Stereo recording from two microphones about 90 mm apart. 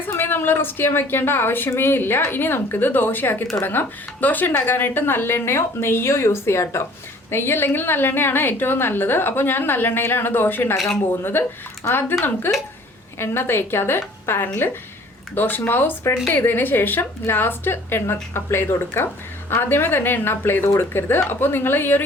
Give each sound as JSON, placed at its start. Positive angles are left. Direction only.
{"t": 0.1, "sound": "speech", "side_deg": 25}
{"t": 13.1, "sound": "speech", "side_deg": 25}